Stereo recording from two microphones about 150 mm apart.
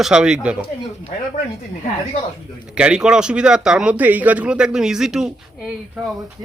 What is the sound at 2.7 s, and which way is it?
A woman's voice, 5° right (ahead or behind).